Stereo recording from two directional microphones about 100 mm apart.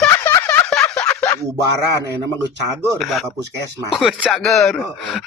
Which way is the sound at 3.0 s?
Centre (ahead or behind).